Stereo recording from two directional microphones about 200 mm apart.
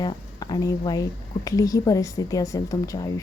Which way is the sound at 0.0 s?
20° left (ahead or behind).